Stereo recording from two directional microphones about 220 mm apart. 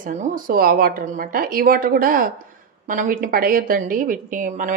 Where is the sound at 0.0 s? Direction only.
35° right (ahead or behind).